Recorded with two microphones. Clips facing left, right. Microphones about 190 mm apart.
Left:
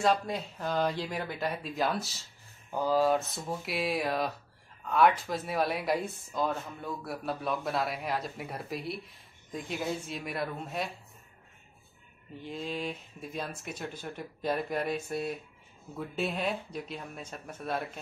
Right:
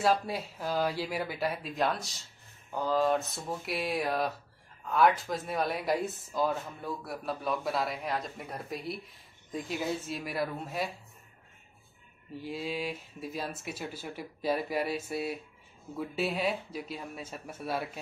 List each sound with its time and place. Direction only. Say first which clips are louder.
0.0 s speech: even; 5° right (ahead or behind)
12.4 s speech: right 1 dB; 5° right (ahead or behind)